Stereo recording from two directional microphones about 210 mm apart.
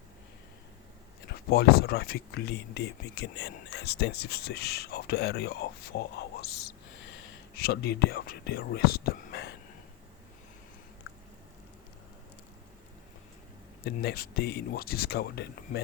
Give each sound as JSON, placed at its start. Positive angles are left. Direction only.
{"t": 1.3, "sound": "speech", "side_deg": 50}
{"t": 13.8, "sound": "speech", "side_deg": 45}